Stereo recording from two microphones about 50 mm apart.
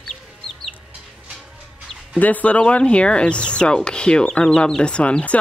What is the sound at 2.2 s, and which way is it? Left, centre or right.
Speech, left.